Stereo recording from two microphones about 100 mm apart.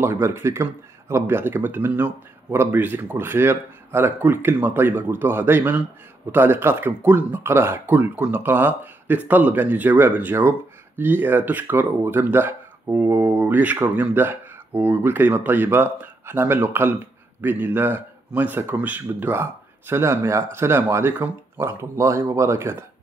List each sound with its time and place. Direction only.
0.0 s speech: 25° right (ahead or behind)